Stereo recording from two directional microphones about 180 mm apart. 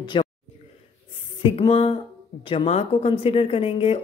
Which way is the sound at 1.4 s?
30° left (ahead or behind).